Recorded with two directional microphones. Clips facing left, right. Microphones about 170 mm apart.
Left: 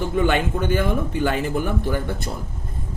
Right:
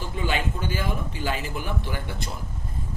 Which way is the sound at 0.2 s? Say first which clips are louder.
Left 7 dB; 55° left (ahead or behind).